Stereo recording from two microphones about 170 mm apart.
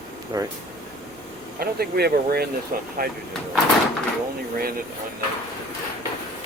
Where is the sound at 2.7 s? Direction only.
50° right (ahead or behind).